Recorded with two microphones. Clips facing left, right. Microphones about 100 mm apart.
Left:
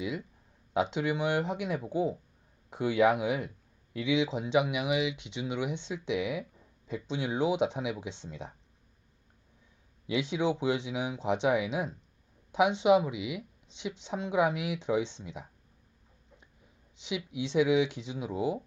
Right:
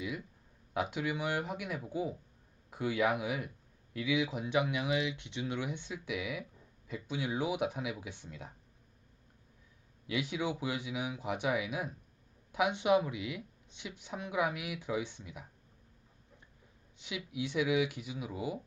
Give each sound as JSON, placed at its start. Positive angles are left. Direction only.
{"t": 0.0, "sound": "speech", "side_deg": 20}
{"t": 10.1, "sound": "speech", "side_deg": 20}
{"t": 17.0, "sound": "speech", "side_deg": 20}